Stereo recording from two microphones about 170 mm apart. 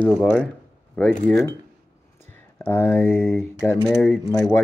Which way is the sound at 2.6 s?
10° left (ahead or behind).